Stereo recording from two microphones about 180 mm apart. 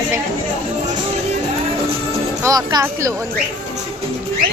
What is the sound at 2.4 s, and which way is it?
Speech, 20° right (ahead or behind).